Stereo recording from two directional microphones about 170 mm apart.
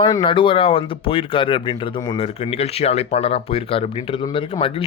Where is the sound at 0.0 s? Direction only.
25° left (ahead or behind).